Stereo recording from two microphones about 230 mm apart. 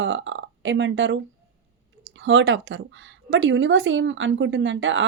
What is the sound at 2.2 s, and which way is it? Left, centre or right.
Speech, right.